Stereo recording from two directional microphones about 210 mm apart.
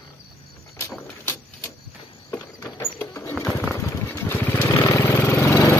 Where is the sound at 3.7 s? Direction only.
10° left (ahead or behind).